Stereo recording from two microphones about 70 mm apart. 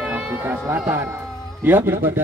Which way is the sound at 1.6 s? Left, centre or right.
Right.